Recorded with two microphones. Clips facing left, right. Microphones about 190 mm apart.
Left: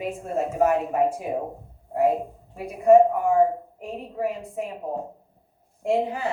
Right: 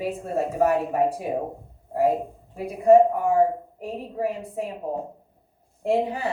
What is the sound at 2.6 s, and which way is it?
A woman's voice, 35° right (ahead or behind).